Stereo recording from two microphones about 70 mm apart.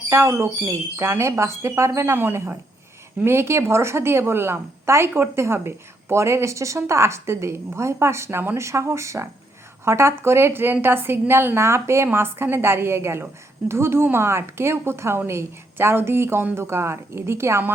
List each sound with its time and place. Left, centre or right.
0.1 s a woman's voice: right